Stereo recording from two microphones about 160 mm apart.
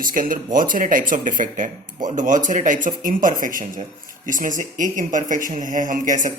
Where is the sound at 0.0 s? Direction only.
60° right (ahead or behind).